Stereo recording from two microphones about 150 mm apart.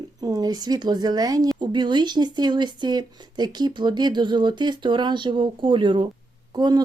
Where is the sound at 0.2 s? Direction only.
25° right (ahead or behind).